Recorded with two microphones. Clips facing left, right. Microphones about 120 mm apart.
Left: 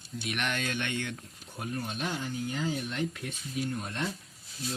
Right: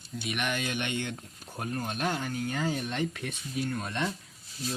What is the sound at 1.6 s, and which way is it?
Speech, 45° right (ahead or behind).